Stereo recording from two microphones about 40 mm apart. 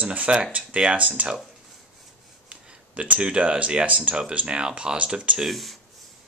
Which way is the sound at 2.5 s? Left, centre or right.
Right.